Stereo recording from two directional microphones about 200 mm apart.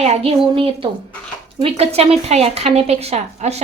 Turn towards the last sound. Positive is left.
turn(degrees=-35)  # may be behind; listen again after turning